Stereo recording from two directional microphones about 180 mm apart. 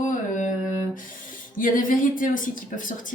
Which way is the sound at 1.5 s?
50° left (ahead or behind).